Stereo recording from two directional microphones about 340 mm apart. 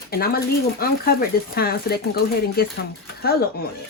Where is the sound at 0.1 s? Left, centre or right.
Left.